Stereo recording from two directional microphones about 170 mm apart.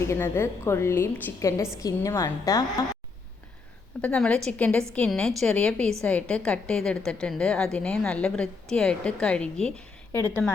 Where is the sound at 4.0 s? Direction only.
10° left (ahead or behind).